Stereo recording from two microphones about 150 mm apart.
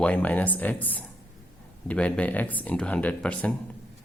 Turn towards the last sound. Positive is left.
turn(degrees=5)  # may be behind; listen again after turning